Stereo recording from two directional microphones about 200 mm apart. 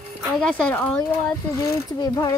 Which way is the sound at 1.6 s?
15° left (ahead or behind).